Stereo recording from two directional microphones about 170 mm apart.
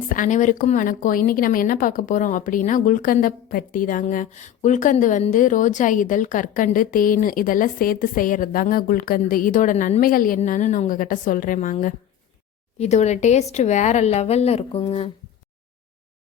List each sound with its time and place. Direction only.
0.1 s a woman's voice: 50° left (ahead or behind); by 15.1 s 30° left (ahead or behind)